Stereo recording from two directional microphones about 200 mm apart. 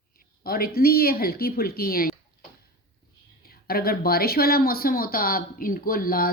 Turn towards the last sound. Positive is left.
turn(degrees=45)  # may be behind; listen again after turning